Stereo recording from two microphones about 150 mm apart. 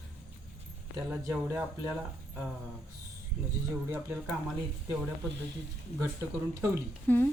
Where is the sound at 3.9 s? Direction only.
15° right (ahead or behind).